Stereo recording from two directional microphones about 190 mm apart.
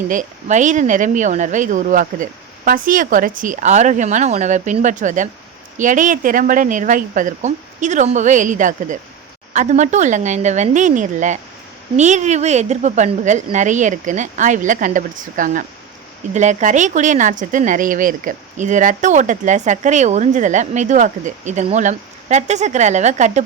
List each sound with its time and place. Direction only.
0.1 s speech: 40° right (ahead or behind)